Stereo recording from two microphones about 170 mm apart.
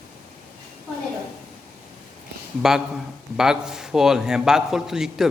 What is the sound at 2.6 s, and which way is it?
A man's voice, 5° right (ahead or behind).